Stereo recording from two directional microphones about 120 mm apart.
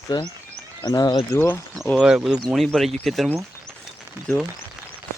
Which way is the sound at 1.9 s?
5° right (ahead or behind).